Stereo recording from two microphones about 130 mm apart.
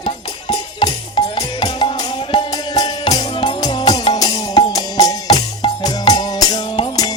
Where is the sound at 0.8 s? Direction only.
35° left (ahead or behind).